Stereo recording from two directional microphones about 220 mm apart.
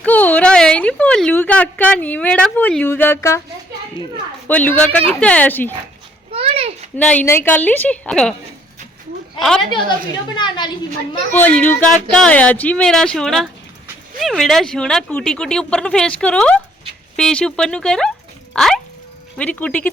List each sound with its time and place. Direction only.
0.0 s a woman's voice: 5° left (ahead or behind)
4.4 s a woman's voice: 10° left (ahead or behind)
6.3 s a sound: 25° right (ahead or behind)
6.9 s a woman's voice: 5° left (ahead or behind)
9.4 s speech: centre (ahead or behind)
10.3 s a woman's voice: 20° left (ahead or behind)
11.3 s a woman's voice: 5° left (ahead or behind)